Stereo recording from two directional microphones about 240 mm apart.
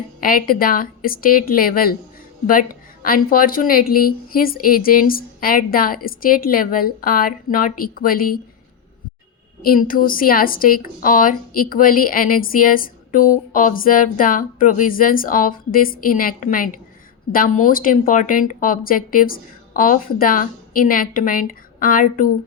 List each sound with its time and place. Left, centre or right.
0.2 s a woman's voice: left
9.6 s a woman's voice: left